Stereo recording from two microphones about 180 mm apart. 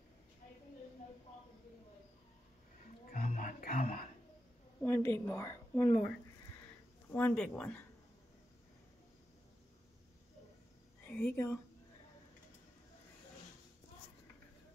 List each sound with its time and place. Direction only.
3.1 s speech: 50° left (ahead or behind)
4.8 s a woman's voice: 15° left (ahead or behind)
7.1 s a woman's voice: 10° left (ahead or behind)
11.1 s speech: 10° left (ahead or behind)